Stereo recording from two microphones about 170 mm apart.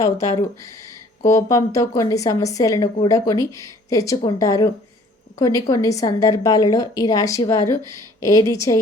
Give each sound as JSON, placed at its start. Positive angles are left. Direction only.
{"t": 1.2, "sound": "a woman's voice", "side_deg": 20}